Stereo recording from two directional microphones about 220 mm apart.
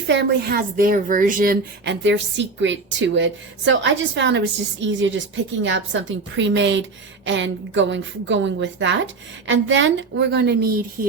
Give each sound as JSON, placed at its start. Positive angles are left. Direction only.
{"t": 0.1, "sound": "a woman's voice", "side_deg": -50}